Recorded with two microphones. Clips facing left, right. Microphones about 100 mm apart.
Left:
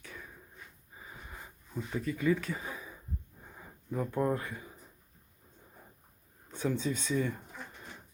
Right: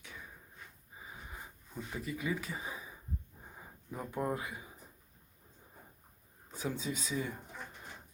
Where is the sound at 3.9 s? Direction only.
5° right (ahead or behind).